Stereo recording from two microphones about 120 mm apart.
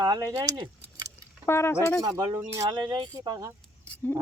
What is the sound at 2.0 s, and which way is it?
Speech, 30° right (ahead or behind).